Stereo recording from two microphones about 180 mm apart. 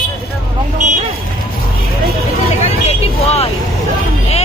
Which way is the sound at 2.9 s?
35° left (ahead or behind).